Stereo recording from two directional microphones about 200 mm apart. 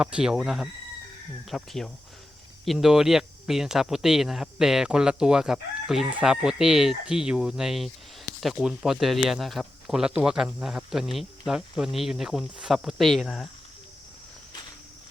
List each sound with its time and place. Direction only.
0.0 s speech: 5° right (ahead or behind)